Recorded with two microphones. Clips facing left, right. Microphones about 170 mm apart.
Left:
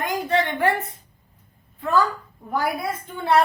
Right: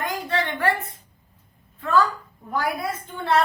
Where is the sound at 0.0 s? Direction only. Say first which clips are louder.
Left 3 dB; 20° left (ahead or behind).